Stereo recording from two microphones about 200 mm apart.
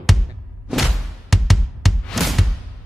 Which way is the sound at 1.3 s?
Centre (ahead or behind).